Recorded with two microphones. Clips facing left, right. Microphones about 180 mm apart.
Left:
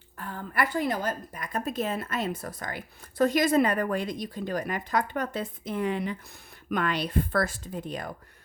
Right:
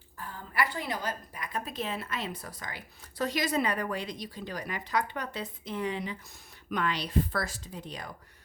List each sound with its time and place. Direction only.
0.2 s a woman's voice: 60° left (ahead or behind)